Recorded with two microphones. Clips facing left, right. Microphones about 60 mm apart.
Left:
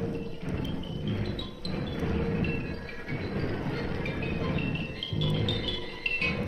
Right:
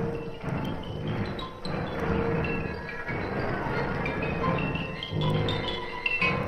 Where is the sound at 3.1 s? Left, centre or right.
Right.